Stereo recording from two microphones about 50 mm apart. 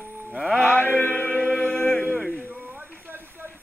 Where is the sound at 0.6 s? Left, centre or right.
Left.